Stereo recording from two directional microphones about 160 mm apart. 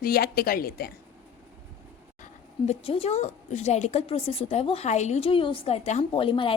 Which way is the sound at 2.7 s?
40° left (ahead or behind).